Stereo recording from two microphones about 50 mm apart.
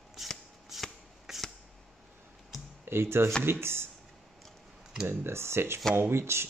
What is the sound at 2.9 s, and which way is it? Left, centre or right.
Speech, right.